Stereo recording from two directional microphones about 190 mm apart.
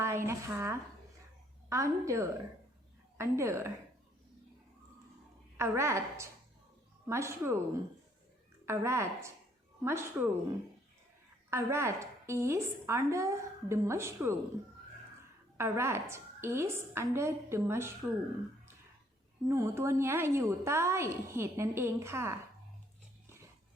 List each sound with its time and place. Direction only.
0.0 s a woman's voice: 15° right (ahead or behind)
5.5 s a woman's voice: 15° right (ahead or behind)
8.6 s a woman's voice: 15° right (ahead or behind)
11.5 s a woman's voice: 15° right (ahead or behind)
15.5 s a woman's voice: 15° right (ahead or behind)
19.5 s a woman's voice: 15° right (ahead or behind)